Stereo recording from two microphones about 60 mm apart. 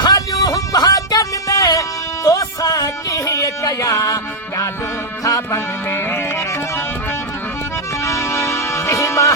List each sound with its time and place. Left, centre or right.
0.1 s music: left
2.2 s music: left
5.5 s music: left
8.0 s music: left